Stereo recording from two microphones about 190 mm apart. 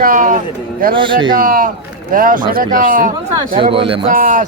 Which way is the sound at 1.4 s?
50° right (ahead or behind).